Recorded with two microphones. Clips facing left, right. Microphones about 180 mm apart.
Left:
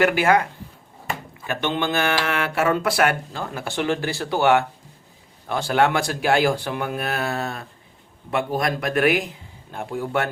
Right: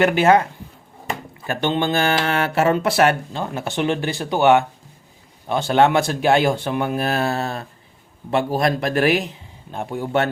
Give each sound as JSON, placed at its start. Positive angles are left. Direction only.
{"t": 0.0, "sound": "speech", "side_deg": -25}
{"t": 1.5, "sound": "speech", "side_deg": -30}